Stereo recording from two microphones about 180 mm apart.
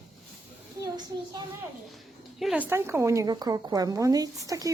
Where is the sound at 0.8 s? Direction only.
20° right (ahead or behind).